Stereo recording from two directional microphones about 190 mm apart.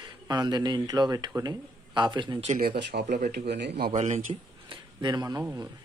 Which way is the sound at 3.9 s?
35° right (ahead or behind).